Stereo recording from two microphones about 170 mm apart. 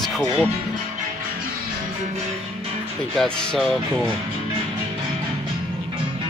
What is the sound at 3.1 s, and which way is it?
Speech, 5° left (ahead or behind).